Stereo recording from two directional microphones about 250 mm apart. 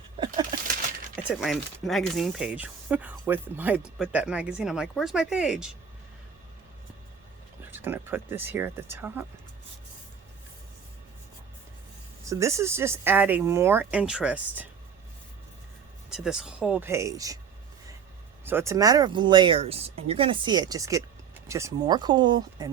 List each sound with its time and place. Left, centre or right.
0.7 s a sound: right
1.3 s speech: centre
7.6 s speech: centre
12.2 s speech: centre
16.0 s speech: centre
18.4 s speech: centre